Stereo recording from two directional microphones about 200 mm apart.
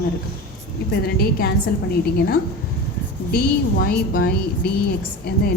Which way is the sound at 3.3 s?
50° left (ahead or behind).